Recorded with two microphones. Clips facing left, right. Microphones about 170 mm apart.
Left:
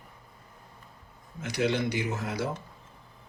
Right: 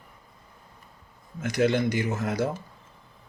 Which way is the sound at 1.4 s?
50° right (ahead or behind).